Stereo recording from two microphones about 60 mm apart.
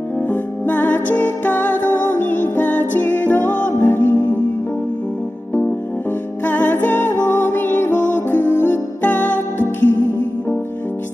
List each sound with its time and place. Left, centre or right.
0.3 s music: left
6.4 s music: left